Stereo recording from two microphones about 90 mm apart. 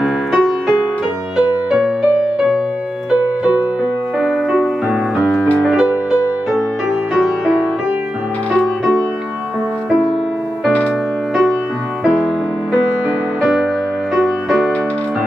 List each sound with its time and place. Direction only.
0.0 s music: 5° right (ahead or behind)
3.1 s music: 15° right (ahead or behind)
4.2 s music: centre (ahead or behind)
7.2 s music: 5° right (ahead or behind)
13.4 s music: centre (ahead or behind)